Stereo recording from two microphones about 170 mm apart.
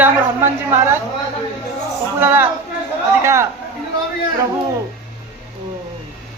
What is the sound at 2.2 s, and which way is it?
A man's voice, 10° right (ahead or behind).